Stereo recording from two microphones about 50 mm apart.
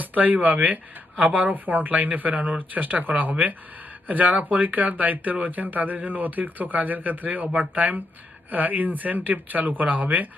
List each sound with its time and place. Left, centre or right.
0.0 s speech: right